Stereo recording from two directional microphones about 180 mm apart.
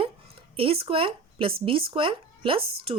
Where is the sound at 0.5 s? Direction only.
30° right (ahead or behind).